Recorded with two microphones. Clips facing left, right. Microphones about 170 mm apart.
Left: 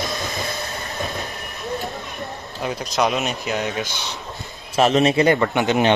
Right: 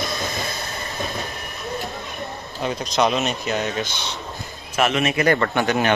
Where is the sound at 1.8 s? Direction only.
Centre (ahead or behind).